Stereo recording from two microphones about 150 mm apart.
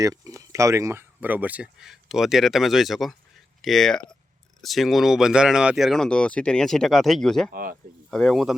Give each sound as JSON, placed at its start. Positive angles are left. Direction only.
{"t": 0.0, "sound": "speech", "side_deg": -20}
{"t": 7.5, "sound": "speech", "side_deg": -70}
{"t": 8.1, "sound": "speech", "side_deg": 0}